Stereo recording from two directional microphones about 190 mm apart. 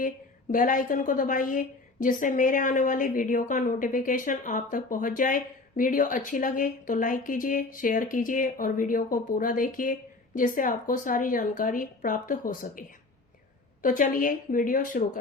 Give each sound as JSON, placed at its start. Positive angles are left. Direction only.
{"t": 0.5, "sound": "a woman's voice", "side_deg": 45}
{"t": 13.8, "sound": "a woman's voice", "side_deg": 45}